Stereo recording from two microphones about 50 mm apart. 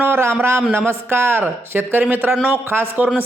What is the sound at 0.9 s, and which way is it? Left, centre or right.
Speech, right.